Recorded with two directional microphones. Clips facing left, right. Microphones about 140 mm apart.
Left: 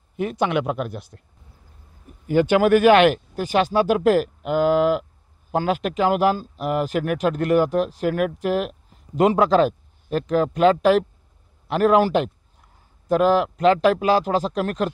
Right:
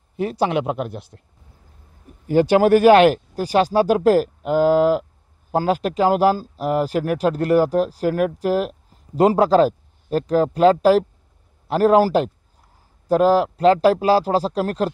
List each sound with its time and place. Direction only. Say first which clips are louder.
0.2 s speech: right 2 dB; 35° right (ahead or behind)
2.2 s speech: right 2 dB; 35° right (ahead or behind)